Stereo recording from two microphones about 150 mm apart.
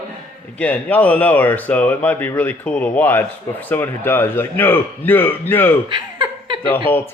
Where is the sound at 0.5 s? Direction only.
10° left (ahead or behind).